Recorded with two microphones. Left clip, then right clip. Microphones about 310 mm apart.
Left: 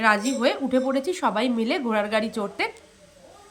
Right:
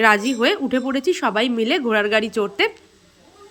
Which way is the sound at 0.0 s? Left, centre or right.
Centre.